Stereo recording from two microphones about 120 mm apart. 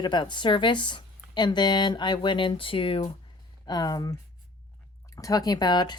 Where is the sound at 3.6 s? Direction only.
35° left (ahead or behind).